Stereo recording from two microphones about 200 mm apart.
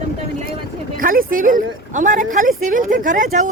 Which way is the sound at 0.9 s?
45° right (ahead or behind).